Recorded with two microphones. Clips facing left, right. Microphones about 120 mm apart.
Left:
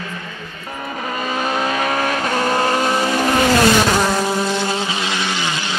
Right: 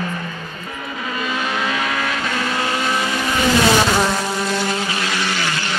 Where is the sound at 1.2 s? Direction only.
40° left (ahead or behind).